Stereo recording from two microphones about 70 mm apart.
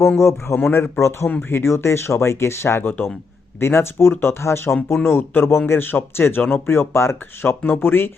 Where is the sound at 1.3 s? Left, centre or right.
Left.